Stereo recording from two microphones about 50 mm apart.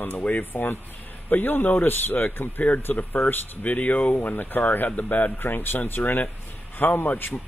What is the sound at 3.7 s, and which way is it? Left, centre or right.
Speech, left.